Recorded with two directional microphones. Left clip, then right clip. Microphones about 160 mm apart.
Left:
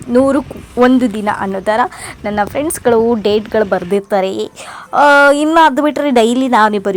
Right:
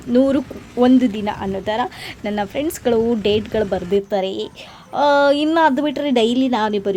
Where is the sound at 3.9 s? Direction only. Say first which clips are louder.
Left 5 dB; 25° left (ahead or behind).